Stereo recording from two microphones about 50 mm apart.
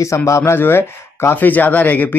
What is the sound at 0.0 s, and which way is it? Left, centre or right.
Speech, left.